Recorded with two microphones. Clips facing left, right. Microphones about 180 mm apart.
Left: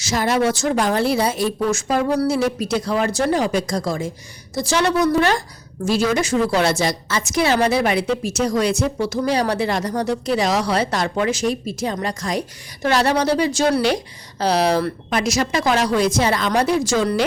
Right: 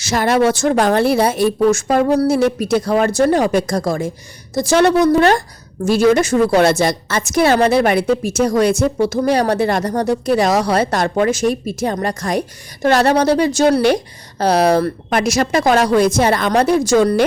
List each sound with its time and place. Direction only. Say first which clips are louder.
0.0 s a woman's voice: right 4 dB; 60° right (ahead or behind)